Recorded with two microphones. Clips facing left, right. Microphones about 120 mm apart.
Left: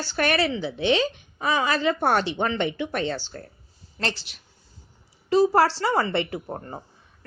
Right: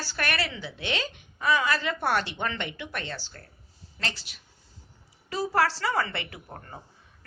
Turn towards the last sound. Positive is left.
turn(degrees=30)  # may be behind; listen again after turning